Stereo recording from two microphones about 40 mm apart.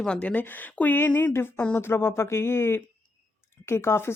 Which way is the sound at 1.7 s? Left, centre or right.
Left.